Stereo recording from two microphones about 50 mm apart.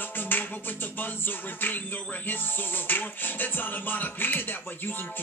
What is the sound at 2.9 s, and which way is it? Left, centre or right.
Music, left.